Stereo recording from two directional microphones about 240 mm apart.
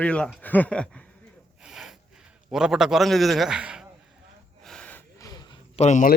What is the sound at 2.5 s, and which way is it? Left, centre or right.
A man's voice, centre.